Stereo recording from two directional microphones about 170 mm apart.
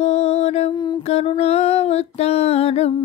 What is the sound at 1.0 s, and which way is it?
Music, 35° left (ahead or behind).